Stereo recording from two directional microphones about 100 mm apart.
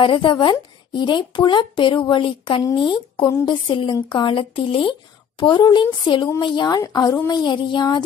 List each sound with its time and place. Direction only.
0.0 s speech: 55° left (ahead or behind)
3.6 s a woman's voice: 55° left (ahead or behind)
5.4 s speech: 50° left (ahead or behind)